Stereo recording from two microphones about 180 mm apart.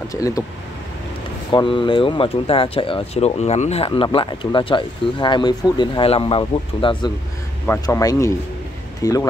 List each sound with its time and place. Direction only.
0.1 s speech: 20° left (ahead or behind)
1.5 s speech: 25° left (ahead or behind)
7.6 s speech: 15° left (ahead or behind)